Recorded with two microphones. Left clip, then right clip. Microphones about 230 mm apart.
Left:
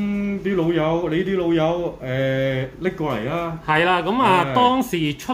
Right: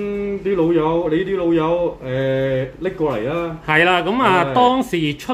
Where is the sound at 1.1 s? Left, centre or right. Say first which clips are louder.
Right 3 dB; left.